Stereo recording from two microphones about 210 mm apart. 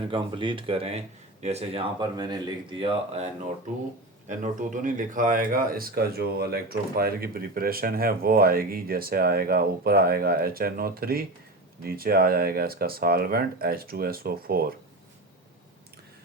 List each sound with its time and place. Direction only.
0.1 s speech: 25° right (ahead or behind)
4.3 s speech: 35° right (ahead or behind)